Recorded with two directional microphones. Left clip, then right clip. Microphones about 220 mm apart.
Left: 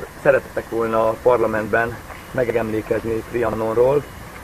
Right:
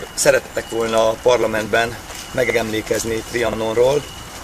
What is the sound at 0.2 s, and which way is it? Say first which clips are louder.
Speech: right 1 dB; 20° right (ahead or behind).